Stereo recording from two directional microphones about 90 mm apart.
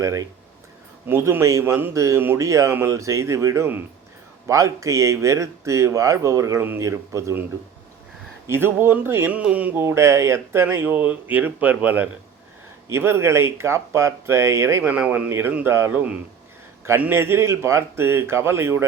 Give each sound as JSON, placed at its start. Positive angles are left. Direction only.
{"t": 0.0, "sound": "speech", "side_deg": -40}
{"t": 1.0, "sound": "speech", "side_deg": -25}
{"t": 8.4, "sound": "speech", "side_deg": -25}
{"t": 12.9, "sound": "speech", "side_deg": -30}
{"t": 15.9, "sound": "a man's voice", "side_deg": -15}